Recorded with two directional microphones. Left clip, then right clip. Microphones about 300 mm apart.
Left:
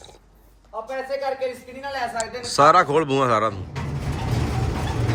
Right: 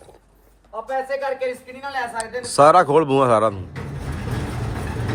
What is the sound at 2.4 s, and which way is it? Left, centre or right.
A man's voice, centre.